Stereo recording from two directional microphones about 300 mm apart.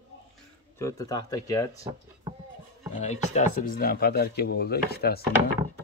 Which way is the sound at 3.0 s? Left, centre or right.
Left.